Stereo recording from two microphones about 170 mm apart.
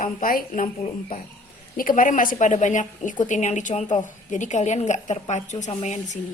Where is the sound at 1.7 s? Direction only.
55° left (ahead or behind).